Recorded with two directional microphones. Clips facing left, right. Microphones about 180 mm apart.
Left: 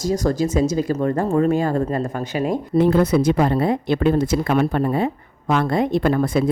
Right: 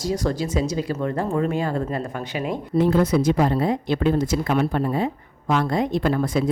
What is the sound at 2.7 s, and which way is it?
Speech, 65° left (ahead or behind).